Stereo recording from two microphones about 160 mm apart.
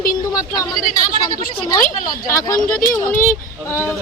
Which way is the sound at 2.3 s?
25° left (ahead or behind).